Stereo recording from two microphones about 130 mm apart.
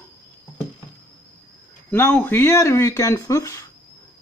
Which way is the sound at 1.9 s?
15° left (ahead or behind).